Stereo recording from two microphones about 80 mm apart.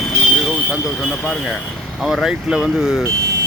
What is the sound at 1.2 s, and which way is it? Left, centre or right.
Speech, centre.